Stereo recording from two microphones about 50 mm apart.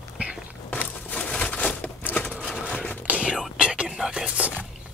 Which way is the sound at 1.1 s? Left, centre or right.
Left.